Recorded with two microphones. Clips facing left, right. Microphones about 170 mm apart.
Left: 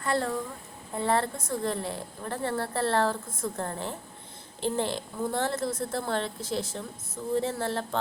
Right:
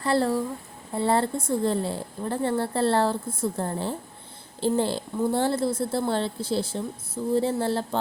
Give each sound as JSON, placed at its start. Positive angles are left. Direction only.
{"t": 0.0, "sound": "a woman's voice", "side_deg": -30}